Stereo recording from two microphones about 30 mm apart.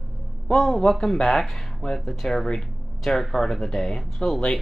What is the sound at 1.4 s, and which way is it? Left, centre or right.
Speech, centre.